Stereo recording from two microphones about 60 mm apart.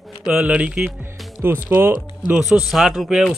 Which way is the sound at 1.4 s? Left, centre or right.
Right.